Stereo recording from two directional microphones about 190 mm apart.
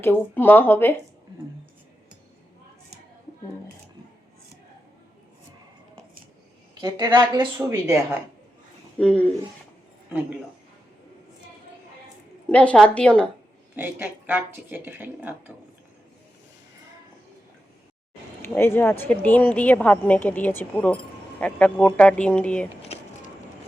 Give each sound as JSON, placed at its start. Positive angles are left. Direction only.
{"t": 0.0, "sound": "a woman's voice", "side_deg": 10}
{"t": 6.7, "sound": "a woman's voice", "side_deg": -20}
{"t": 9.0, "sound": "speech", "side_deg": 5}
{"t": 12.5, "sound": "a woman's voice", "side_deg": 5}
{"t": 13.7, "sound": "speech", "side_deg": -10}
{"t": 18.4, "sound": "a woman's voice", "side_deg": 10}